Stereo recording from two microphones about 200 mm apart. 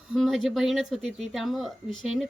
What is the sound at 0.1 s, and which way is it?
A woman's voice, centre (ahead or behind).